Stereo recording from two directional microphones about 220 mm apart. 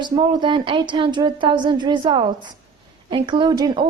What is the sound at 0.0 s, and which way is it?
A woman's voice, 20° right (ahead or behind).